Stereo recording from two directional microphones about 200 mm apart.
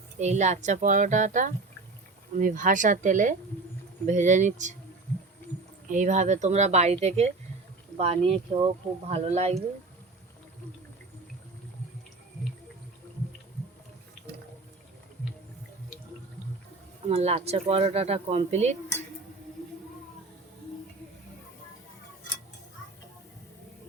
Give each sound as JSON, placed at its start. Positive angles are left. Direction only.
{"t": 0.2, "sound": "speech", "side_deg": -35}
{"t": 5.9, "sound": "speech", "side_deg": -35}
{"t": 17.1, "sound": "speech", "side_deg": -30}